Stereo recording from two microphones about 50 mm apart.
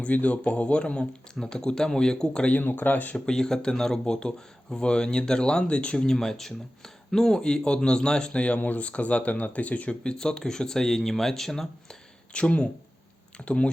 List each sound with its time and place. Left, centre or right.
0.0 s speech: left; by 2.5 s centre
2.5 s speech: left
3.2 s speech: centre
8.5 s speech: left
10.0 s speech: centre
12.3 s speech: left